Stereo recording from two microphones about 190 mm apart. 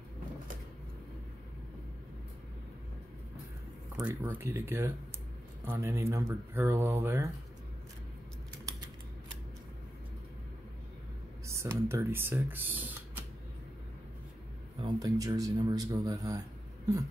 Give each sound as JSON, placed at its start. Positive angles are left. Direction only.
{"t": 3.9, "sound": "speech", "side_deg": -10}
{"t": 11.4, "sound": "speech", "side_deg": -15}
{"t": 14.8, "sound": "speech", "side_deg": -20}